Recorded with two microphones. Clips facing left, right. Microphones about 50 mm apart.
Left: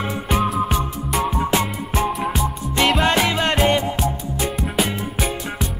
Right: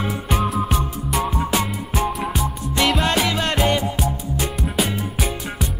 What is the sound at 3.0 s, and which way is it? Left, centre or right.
Music, centre.